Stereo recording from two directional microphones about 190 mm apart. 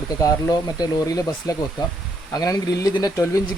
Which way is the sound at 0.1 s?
20° left (ahead or behind).